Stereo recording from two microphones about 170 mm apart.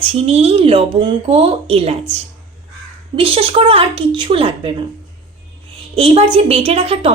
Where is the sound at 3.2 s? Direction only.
35° right (ahead or behind).